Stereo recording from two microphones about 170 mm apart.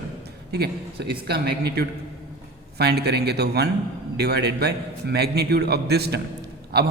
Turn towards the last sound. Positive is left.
turn(degrees=-70)  # may be behind; listen again after turning